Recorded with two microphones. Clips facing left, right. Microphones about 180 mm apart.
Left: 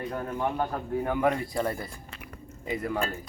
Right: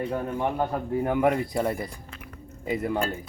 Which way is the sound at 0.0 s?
10° right (ahead or behind).